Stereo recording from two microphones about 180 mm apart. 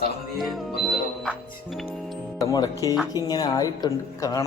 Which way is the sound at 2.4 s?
20° left (ahead or behind).